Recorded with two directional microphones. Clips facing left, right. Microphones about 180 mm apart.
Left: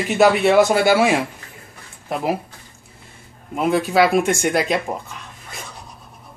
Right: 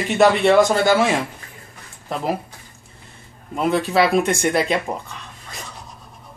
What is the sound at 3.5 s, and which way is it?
Speech, 5° left (ahead or behind).